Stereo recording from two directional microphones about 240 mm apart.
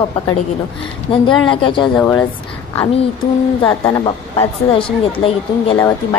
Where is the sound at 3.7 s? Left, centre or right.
Left.